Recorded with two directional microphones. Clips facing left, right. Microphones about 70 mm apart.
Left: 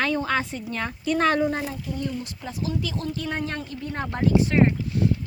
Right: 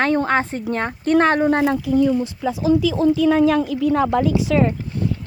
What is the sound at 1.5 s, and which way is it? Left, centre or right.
Speech, right.